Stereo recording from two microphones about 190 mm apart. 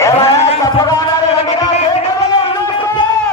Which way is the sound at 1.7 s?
30° left (ahead or behind).